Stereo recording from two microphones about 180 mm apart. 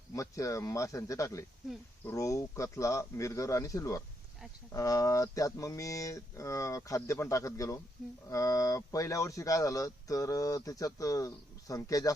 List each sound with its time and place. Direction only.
0.1 s speech: 15° left (ahead or behind)